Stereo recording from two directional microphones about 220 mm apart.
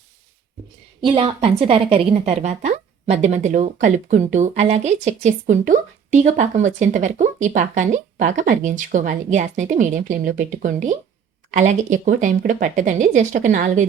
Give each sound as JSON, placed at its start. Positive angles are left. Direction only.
{"t": 1.0, "sound": "a woman's voice", "side_deg": -25}